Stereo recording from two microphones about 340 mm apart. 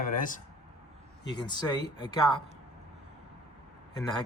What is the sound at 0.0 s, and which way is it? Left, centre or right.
Speech, left.